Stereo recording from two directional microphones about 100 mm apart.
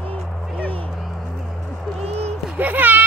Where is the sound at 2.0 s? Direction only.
90° right.